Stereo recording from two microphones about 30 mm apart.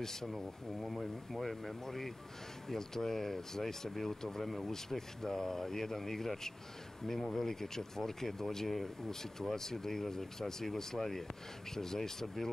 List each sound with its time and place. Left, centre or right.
0.0 s speech: centre
7.1 s speech: centre
7.3 s speech: centre